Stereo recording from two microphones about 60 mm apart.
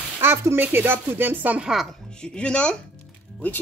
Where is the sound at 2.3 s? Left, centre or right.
Centre.